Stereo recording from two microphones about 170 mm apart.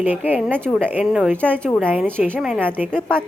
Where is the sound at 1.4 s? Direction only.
5° left (ahead or behind); by 2.9 s 10° right (ahead or behind).